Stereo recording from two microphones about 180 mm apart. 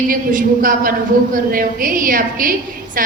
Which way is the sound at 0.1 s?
50° right (ahead or behind).